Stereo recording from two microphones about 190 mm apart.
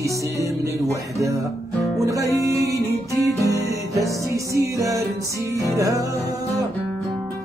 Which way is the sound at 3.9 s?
15° right (ahead or behind).